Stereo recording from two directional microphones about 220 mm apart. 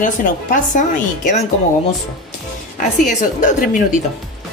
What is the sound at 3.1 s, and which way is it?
Speech, 35° left (ahead or behind).